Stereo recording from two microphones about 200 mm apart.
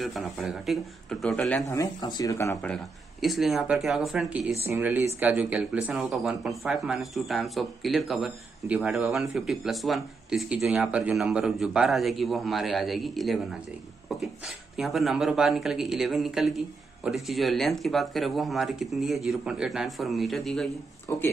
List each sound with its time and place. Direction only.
0.0 s speech: centre (ahead or behind)
1.7 s speech: 20° left (ahead or behind)
2.7 s speech: centre (ahead or behind)
21.1 s speech: 10° left (ahead or behind)